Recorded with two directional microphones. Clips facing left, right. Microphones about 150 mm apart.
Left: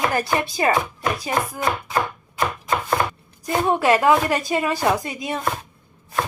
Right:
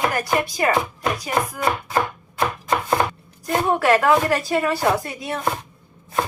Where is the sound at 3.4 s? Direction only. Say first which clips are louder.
Even; 20° left (ahead or behind).